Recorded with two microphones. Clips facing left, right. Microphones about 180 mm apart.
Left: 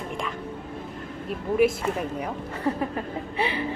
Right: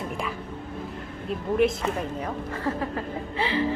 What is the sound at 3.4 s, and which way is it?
Music, 20° left (ahead or behind).